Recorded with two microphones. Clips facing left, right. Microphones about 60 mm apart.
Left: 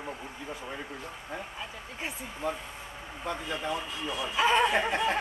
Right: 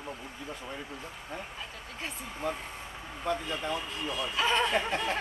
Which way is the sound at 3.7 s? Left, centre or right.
Left.